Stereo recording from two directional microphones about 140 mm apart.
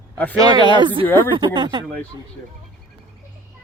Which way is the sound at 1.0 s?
15° left (ahead or behind).